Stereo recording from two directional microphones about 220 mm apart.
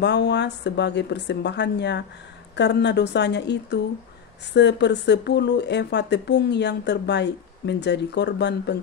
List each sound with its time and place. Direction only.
0.0 s speech: 50° left (ahead or behind)